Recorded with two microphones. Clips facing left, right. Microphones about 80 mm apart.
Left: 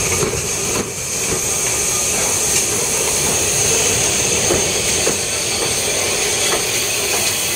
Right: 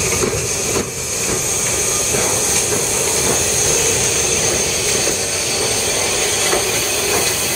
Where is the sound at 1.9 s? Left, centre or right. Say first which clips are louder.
Right 3 dB; right.